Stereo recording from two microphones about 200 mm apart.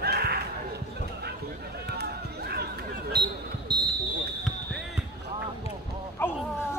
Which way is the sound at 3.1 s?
55° right (ahead or behind).